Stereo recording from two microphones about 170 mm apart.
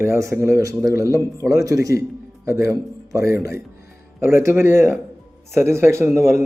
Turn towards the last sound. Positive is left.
turn(degrees=-15)  # may be behind; listen again after turning